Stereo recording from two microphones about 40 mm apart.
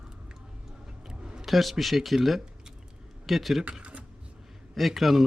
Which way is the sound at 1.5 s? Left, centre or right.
Centre.